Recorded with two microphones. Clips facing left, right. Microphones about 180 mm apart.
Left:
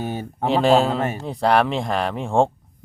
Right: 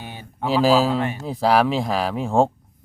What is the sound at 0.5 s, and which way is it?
Speech, centre (ahead or behind).